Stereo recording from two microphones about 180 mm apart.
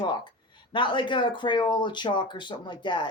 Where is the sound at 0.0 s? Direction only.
25° left (ahead or behind).